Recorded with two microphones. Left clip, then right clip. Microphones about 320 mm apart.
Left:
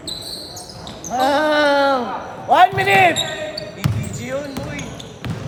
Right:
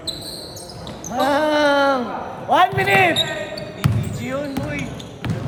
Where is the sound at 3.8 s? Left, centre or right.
Centre.